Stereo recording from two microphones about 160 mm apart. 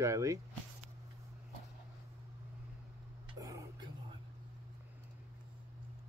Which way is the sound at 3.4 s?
20° right (ahead or behind).